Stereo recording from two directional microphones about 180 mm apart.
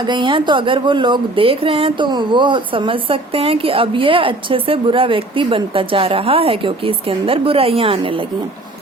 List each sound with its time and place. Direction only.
0.0 s speech: 25° right (ahead or behind)